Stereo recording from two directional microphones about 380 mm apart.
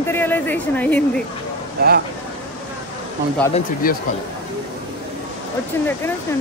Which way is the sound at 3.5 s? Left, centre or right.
Left.